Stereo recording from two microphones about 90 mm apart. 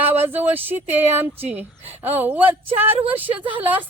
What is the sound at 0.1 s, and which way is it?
A woman's voice, 20° right (ahead or behind).